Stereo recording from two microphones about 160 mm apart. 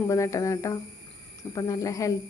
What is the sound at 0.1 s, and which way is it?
A woman's voice, 20° left (ahead or behind).